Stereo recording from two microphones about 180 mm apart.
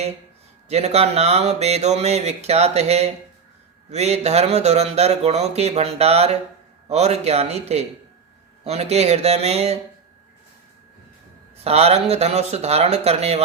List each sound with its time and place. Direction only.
0.7 s speech: 35° right (ahead or behind)
11.6 s speech: 35° right (ahead or behind)